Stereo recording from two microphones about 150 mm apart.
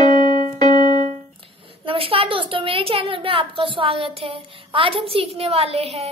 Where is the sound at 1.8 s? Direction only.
35° right (ahead or behind).